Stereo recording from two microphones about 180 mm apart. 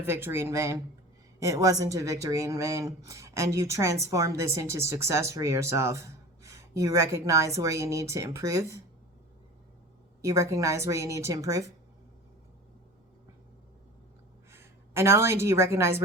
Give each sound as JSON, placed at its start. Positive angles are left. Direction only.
{"t": 0.0, "sound": "a woman's voice", "side_deg": -10}
{"t": 10.2, "sound": "a woman's voice", "side_deg": -15}
{"t": 14.5, "sound": "a woman's voice", "side_deg": -15}